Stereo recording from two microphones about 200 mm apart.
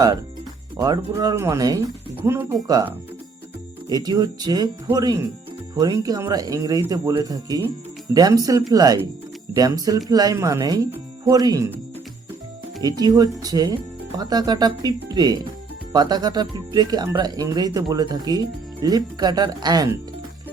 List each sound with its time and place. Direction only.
0.8 s speech: 20° right (ahead or behind)
12.8 s speech: 20° right (ahead or behind)